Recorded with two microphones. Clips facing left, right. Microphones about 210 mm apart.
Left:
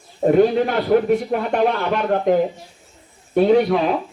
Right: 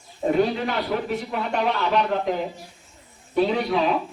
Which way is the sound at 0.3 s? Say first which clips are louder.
Left 7 dB; 50° left (ahead or behind).